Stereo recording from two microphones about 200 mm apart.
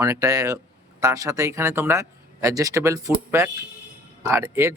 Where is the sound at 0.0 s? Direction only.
15° right (ahead or behind).